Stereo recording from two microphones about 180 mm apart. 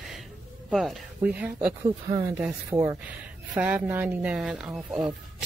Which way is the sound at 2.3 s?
10° right (ahead or behind).